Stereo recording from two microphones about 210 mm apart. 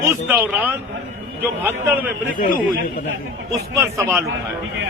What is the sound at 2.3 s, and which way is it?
Speech, 40° left (ahead or behind).